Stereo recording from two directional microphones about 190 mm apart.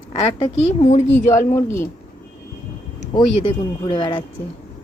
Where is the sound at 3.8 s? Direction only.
25° left (ahead or behind).